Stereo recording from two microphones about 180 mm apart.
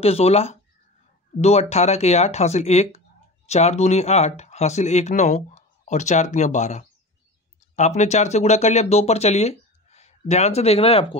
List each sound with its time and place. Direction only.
0.0 s speech: 35° left (ahead or behind)